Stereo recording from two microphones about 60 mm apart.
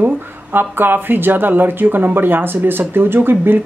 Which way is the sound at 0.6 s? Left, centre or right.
Right.